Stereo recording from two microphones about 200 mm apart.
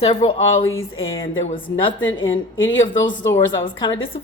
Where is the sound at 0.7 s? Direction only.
85° left.